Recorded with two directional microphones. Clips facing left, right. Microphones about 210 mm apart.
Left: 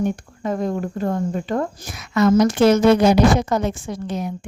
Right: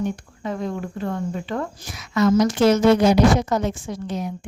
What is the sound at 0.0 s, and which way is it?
A woman's voice, 45° left (ahead or behind).